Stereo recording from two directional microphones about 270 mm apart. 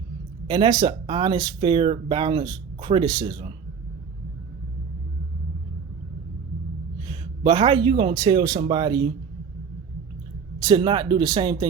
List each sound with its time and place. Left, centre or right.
0.4 s speech: centre
7.1 s speech: centre
10.6 s speech: centre